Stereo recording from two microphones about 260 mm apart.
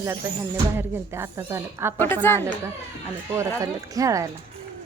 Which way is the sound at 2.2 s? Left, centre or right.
Centre.